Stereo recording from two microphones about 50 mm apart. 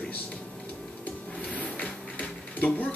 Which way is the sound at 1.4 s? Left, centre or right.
Left.